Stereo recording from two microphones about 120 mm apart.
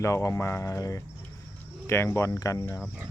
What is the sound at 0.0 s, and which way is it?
Speech, 25° left (ahead or behind).